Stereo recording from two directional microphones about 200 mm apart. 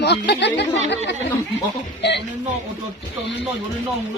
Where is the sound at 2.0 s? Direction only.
60° left (ahead or behind).